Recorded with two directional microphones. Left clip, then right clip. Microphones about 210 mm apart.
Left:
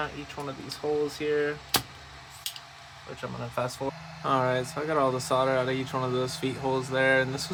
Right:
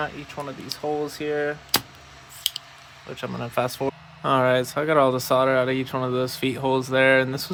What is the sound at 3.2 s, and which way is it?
Speech, 55° right (ahead or behind).